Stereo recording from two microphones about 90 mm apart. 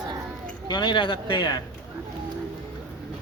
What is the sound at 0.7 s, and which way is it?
Speech, 60° left (ahead or behind).